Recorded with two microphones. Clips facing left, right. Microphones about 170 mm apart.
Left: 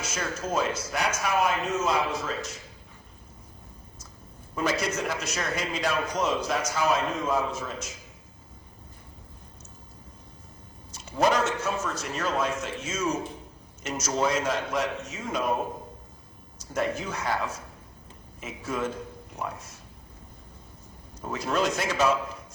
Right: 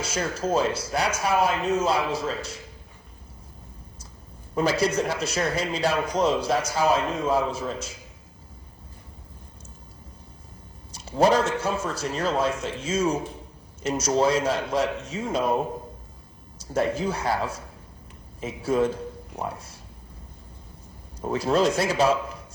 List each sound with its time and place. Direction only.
0.0 s a man's voice: 30° right (ahead or behind)
4.5 s a man's voice: 30° right (ahead or behind)
10.9 s a man's voice: 30° right (ahead or behind)
16.6 s a man's voice: 30° right (ahead or behind)
21.2 s a man's voice: 30° right (ahead or behind)